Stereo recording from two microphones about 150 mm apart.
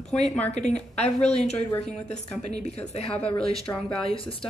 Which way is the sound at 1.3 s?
45° left (ahead or behind).